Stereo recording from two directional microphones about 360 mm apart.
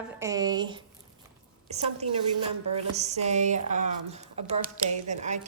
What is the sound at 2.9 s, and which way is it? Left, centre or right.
Speech, centre.